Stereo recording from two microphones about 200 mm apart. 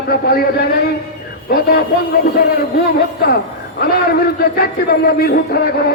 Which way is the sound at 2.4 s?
50° left (ahead or behind).